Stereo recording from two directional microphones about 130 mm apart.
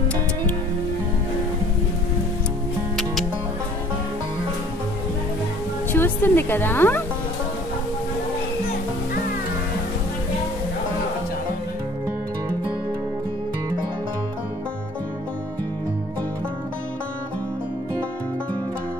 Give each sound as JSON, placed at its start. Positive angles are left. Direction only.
{"t": 5.9, "sound": "speech", "side_deg": 15}